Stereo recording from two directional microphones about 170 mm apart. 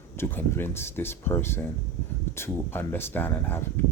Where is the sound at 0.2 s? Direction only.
15° left (ahead or behind).